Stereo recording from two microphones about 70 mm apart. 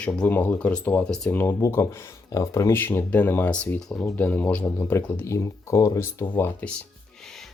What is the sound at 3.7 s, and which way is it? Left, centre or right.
Speech, centre.